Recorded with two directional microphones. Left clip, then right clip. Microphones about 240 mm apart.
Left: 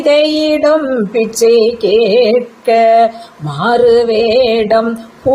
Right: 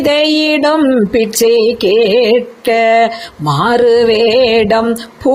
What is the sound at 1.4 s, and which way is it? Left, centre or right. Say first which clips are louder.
Female singing: left 2 dB; right.